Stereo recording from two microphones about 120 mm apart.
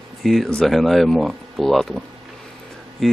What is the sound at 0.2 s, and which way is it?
Speech, centre (ahead or behind).